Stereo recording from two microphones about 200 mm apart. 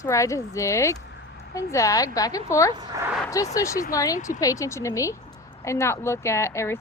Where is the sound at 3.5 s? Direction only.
15° left (ahead or behind).